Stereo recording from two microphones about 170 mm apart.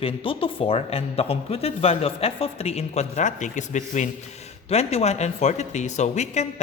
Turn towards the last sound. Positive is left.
turn(degrees=40)  # may be behind; listen again after turning